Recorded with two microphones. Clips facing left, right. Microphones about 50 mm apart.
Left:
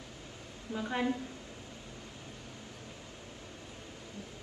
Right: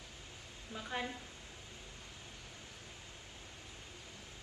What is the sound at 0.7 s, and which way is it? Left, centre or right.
Speech, left.